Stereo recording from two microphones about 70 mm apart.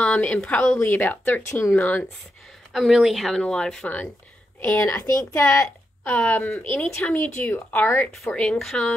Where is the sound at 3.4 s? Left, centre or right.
Centre.